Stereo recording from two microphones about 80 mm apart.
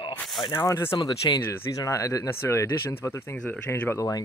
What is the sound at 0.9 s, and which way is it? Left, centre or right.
Speech, left.